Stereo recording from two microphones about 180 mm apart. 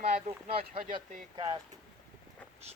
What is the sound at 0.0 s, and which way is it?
Speech, 35° right (ahead or behind).